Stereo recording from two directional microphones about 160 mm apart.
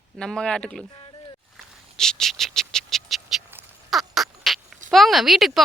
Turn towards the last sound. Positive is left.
turn(degrees=0)  # may be behind; listen again after turning